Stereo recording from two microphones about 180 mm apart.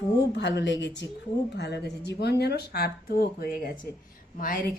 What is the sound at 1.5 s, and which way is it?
Speech, 70° left (ahead or behind).